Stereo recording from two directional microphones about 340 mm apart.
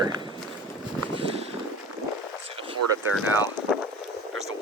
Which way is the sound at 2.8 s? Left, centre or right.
Right.